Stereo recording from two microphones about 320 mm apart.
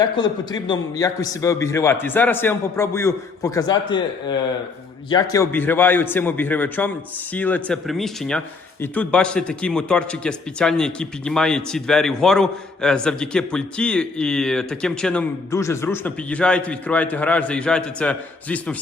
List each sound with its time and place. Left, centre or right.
0.0 s a man's voice: centre